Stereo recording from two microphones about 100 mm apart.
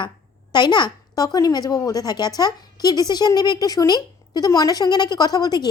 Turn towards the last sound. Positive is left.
turn(degrees=45)  # may be behind; listen again after turning